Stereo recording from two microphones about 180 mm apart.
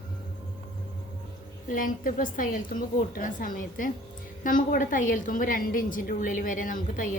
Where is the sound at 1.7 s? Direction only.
50° left (ahead or behind).